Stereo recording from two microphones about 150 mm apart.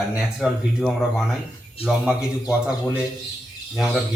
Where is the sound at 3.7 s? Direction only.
Centre (ahead or behind).